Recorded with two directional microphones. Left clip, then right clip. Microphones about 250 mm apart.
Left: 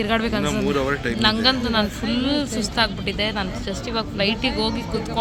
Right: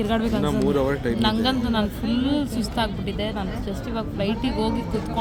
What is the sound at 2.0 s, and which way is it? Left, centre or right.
Speech, left.